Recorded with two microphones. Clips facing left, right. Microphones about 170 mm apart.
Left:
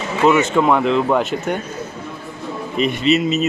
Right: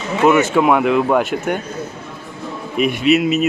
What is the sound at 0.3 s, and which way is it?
Speech, 5° right (ahead or behind).